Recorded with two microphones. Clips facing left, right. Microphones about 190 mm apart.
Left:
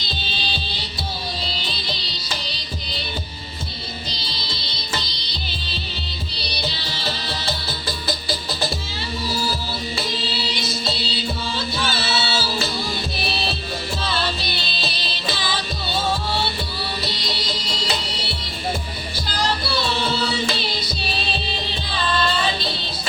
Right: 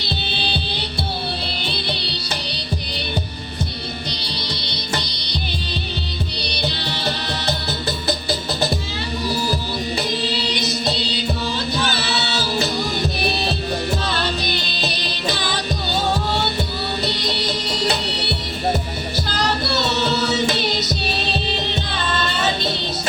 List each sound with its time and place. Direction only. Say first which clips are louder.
0.0 s music: right 5 dB; 60° right (ahead or behind)
6.6 s music: right 4 dB; 60° right (ahead or behind)
10.5 s music: right 4 dB; 20° right (ahead or behind)
17.1 s music: right 5 dB; 60° right (ahead or behind)
19.7 s chant: right 2 dB; 20° right (ahead or behind)
20.5 s music: right 5 dB; 20° right (ahead or behind)